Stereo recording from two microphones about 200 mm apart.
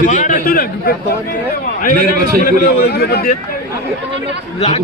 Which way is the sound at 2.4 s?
45° left (ahead or behind).